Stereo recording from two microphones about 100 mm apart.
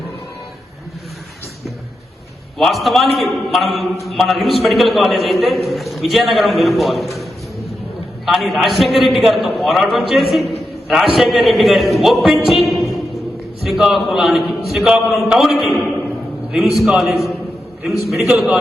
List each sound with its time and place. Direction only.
2.6 s a man's voice: centre (ahead or behind)
12.7 s music: centre (ahead or behind)
13.7 s a man's voice: centre (ahead or behind)